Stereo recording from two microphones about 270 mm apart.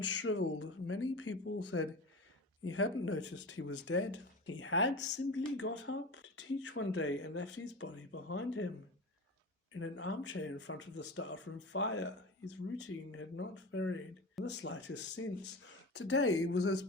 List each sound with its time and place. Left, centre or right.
0.2 s speech: left
9.7 s speech: left